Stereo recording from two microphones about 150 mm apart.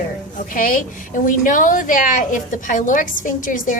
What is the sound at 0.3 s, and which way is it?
A woman's voice, 65° left (ahead or behind).